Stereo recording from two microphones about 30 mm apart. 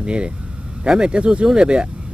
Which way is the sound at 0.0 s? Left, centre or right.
Right.